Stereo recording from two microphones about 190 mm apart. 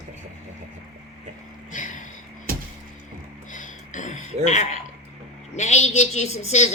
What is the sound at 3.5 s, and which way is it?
Throat clearing, 40° left (ahead or behind).